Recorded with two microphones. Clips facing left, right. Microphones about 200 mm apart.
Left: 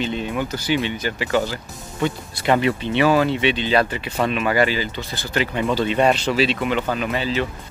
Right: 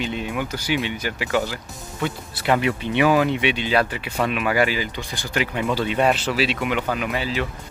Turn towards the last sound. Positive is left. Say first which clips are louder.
# left 2 dB
turn(degrees=-10)  # may be behind; listen again after turning